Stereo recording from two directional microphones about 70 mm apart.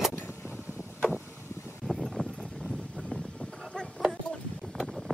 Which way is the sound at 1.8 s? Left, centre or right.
Centre.